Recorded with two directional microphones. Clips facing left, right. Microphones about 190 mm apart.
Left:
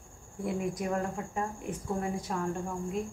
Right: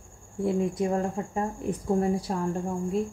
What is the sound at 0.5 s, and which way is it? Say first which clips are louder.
Speech: right 6 dB; 25° right (ahead or behind).